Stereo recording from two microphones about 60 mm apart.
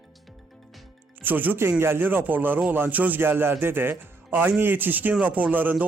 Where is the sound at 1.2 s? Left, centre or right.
Right.